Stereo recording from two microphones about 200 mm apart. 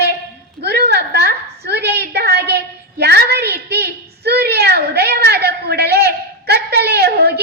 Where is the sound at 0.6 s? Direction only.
55° right (ahead or behind).